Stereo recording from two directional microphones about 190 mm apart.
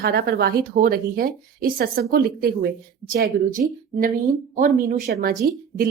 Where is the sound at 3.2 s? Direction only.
55° right (ahead or behind).